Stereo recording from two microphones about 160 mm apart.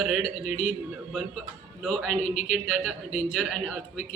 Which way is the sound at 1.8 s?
5° left (ahead or behind).